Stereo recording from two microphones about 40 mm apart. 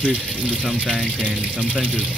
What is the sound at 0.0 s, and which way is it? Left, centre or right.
Speech, right.